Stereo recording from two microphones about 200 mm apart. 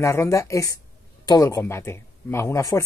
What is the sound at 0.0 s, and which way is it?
Speech, 15° left (ahead or behind).